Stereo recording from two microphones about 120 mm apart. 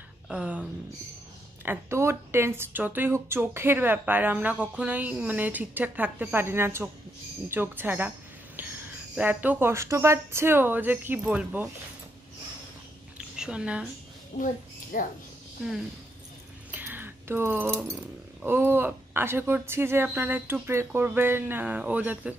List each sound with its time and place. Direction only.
0.3 s speech: 10° right (ahead or behind)
1.6 s speech: 20° right (ahead or behind)
8.6 s a sound: 15° right (ahead or behind)
9.1 s speech: 15° right (ahead or behind)
13.4 s a woman's voice: 5° right (ahead or behind)
16.7 s a sound: 15° right (ahead or behind)
18.4 s speech: 20° right (ahead or behind)